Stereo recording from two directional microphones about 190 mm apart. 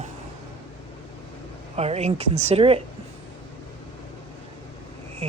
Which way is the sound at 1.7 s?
35° right (ahead or behind).